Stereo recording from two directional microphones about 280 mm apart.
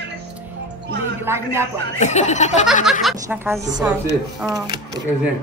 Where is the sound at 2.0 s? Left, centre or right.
Left.